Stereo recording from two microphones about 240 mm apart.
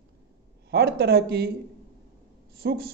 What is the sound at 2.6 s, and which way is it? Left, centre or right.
Speech, right.